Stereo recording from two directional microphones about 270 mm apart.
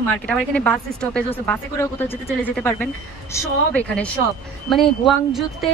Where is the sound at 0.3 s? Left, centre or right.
Centre.